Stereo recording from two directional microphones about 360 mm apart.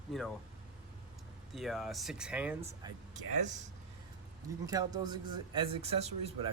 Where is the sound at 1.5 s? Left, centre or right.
Centre.